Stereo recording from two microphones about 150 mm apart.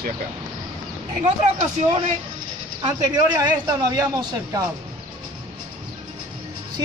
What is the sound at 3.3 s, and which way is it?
Speech, 25° right (ahead or behind).